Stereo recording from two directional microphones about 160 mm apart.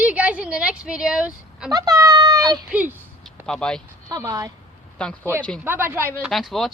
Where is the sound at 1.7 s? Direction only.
25° right (ahead or behind).